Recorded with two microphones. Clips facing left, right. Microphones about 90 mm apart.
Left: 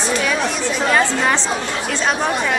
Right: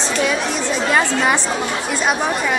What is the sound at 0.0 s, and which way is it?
Chatter, 25° right (ahead or behind).